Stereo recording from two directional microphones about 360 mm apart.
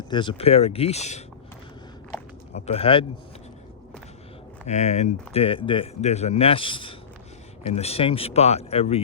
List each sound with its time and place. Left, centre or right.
0.1 s speech: centre
2.6 s speech: centre
4.6 s speech: centre